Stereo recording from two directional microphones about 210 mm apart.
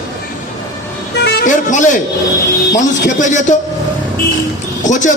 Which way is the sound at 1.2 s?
35° left (ahead or behind).